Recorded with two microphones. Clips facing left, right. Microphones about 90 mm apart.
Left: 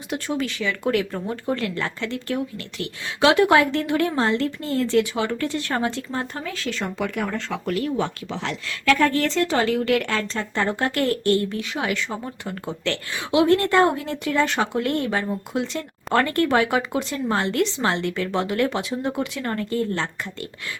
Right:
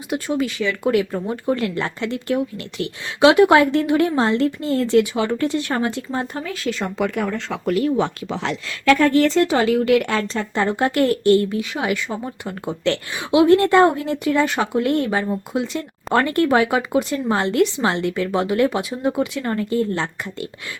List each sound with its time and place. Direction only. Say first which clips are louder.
0.1 s speech: right 4 dB; 10° right (ahead or behind)